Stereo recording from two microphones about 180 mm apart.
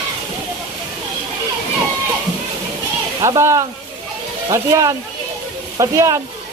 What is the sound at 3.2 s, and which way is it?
Speech, 15° right (ahead or behind).